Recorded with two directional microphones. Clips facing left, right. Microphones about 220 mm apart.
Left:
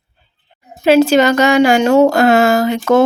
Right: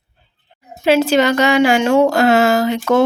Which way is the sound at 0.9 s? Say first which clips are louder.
Left 3 dB; 45° left (ahead or behind).